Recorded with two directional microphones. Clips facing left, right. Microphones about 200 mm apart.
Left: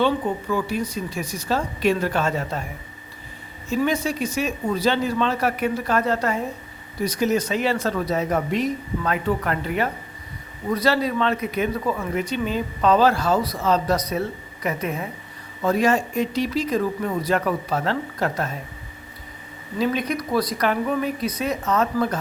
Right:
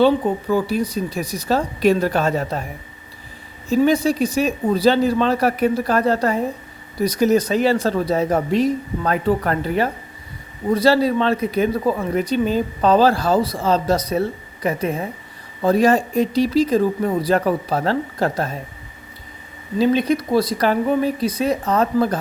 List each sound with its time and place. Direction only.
0.5 s speech: 35° right (ahead or behind)
3.7 s speech: 35° right (ahead or behind)
19.8 s speech: 30° right (ahead or behind)